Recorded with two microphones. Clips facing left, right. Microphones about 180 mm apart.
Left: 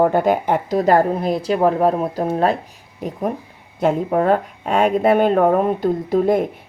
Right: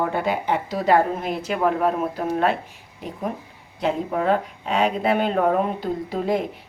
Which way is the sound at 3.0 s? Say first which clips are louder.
Left 6 dB; 45° left (ahead or behind).